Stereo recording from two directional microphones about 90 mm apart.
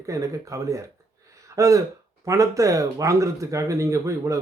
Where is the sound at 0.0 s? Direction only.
35° right (ahead or behind).